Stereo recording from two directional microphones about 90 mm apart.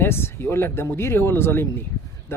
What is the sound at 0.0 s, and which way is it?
A man's voice, 25° left (ahead or behind).